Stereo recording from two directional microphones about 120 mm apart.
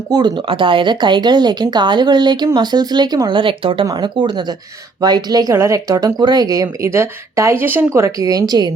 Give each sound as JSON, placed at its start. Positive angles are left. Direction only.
{"t": 0.1, "sound": "speech", "side_deg": -35}